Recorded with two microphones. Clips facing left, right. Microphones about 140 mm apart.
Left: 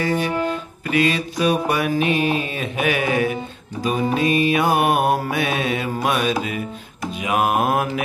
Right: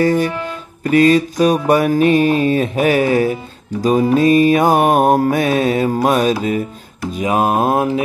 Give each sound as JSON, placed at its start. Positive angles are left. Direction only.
{"t": 0.0, "sound": "speech", "side_deg": -40}
{"t": 0.8, "sound": "mantra", "side_deg": -40}